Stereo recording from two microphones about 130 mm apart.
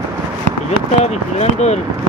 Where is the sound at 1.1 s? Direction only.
60° left (ahead or behind).